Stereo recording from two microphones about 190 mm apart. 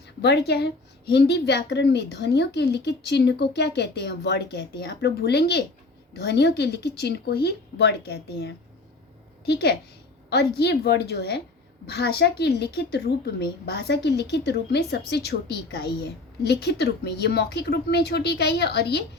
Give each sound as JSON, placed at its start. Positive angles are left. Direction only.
{"t": 0.2, "sound": "a woman's voice", "side_deg": 60}